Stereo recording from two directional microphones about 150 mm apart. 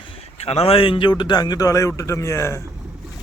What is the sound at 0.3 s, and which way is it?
A man's voice, 45° left (ahead or behind).